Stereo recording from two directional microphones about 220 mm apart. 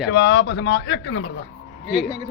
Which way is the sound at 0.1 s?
50° left (ahead or behind).